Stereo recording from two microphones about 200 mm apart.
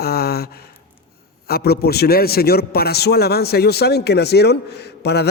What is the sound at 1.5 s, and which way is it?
A man's voice, 50° left (ahead or behind).